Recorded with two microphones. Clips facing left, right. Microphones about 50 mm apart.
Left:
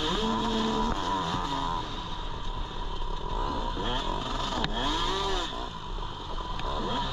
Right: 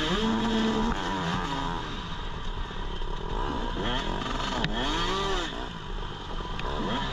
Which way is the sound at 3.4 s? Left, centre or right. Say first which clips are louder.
Right 1 dB; right.